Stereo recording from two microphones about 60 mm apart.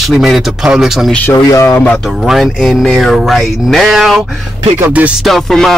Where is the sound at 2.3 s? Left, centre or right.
Centre.